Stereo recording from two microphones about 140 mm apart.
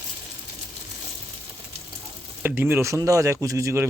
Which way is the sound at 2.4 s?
15° right (ahead or behind).